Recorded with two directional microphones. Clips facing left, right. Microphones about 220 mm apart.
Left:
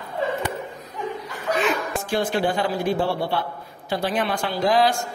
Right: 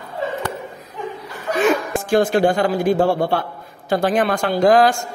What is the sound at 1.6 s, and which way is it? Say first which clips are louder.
A man's voice: right 9 dB; 45° right (ahead or behind).